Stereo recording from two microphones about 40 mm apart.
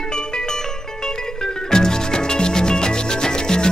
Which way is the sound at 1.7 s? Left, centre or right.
Centre.